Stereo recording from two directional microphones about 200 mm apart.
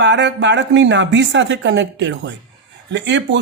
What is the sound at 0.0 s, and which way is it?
Speech, 65° right (ahead or behind).